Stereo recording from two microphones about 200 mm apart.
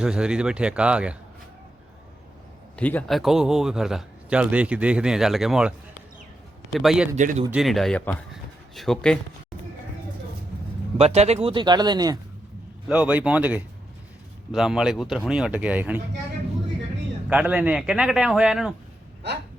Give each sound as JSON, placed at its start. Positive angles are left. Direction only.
{"t": 0.0, "sound": "speech", "side_deg": -5}
{"t": 2.7, "sound": "speech", "side_deg": 5}
{"t": 6.7, "sound": "speech", "side_deg": 0}
{"t": 7.2, "sound": "speech", "side_deg": -40}
{"t": 7.5, "sound": "speech", "side_deg": 0}
{"t": 10.9, "sound": "speech", "side_deg": -30}
{"t": 12.9, "sound": "speech", "side_deg": -5}
{"t": 17.2, "sound": "speech", "side_deg": -10}